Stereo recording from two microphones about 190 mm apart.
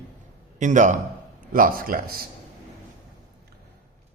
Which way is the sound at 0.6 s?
40° right (ahead or behind).